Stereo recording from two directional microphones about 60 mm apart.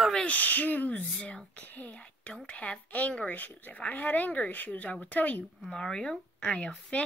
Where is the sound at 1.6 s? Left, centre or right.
Left.